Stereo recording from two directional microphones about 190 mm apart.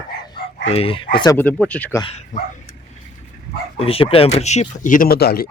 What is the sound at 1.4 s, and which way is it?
Speech, 10° left (ahead or behind).